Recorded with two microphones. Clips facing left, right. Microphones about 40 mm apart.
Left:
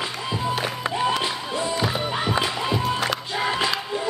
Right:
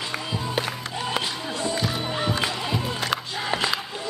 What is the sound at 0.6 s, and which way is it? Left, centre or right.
Music, centre.